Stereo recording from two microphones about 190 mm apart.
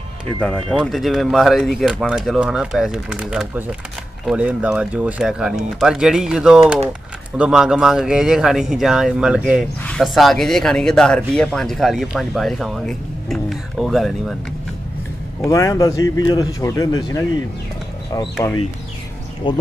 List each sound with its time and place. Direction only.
0.4 s speech: 5° left (ahead or behind)
15.4 s speech: 15° left (ahead or behind)
19.4 s speech: 25° left (ahead or behind)